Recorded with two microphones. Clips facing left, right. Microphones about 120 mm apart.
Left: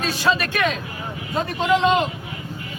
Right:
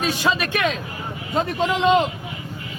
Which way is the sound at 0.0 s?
20° right (ahead or behind).